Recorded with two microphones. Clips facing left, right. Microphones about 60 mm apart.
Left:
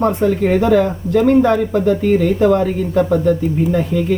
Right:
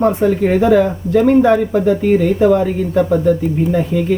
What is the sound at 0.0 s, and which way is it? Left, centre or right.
Speech, centre.